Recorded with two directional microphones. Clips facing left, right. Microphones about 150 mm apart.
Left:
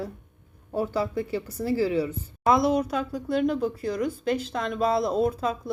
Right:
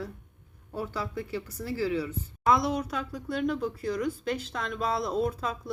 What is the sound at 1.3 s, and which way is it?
Speech, 30° left (ahead or behind).